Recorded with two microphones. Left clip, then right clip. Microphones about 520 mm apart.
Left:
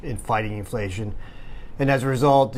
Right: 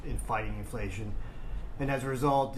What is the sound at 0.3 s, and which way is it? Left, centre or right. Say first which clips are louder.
Speech: left 10 dB; left.